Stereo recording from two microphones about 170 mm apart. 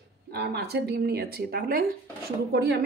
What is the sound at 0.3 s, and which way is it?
Speech, 75° right (ahead or behind).